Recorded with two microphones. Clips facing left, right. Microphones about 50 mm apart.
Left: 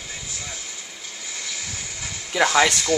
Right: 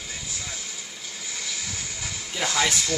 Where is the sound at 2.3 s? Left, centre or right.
Left.